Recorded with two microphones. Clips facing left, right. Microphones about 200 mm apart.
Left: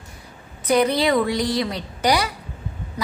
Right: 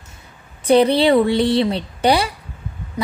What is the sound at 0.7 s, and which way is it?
A woman's voice, 30° right (ahead or behind).